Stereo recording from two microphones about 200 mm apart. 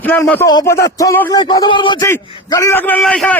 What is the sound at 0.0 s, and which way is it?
Speech, 10° left (ahead or behind).